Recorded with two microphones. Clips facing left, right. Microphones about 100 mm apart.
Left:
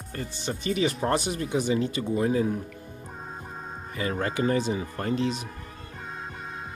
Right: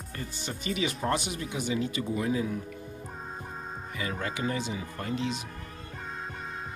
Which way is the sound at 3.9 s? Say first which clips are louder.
Left 6 dB; 45° left (ahead or behind).